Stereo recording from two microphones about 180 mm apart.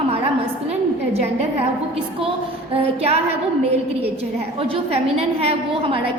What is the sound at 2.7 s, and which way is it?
Speech, 35° right (ahead or behind).